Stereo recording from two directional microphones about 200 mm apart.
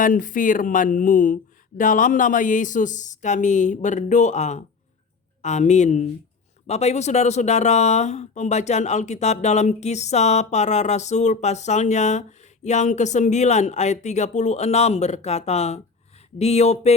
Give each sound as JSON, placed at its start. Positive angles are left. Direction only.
{"t": 0.0, "sound": "speech", "side_deg": 40}